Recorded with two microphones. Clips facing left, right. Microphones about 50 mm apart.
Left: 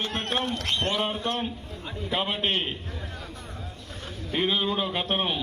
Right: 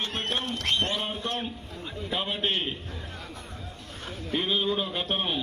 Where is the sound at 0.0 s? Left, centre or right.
Left.